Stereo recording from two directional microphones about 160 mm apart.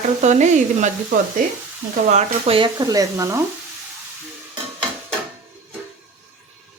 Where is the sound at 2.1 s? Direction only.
35° right (ahead or behind); by 3.4 s 20° right (ahead or behind).